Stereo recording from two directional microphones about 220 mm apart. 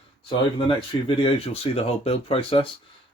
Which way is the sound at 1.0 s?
25° left (ahead or behind).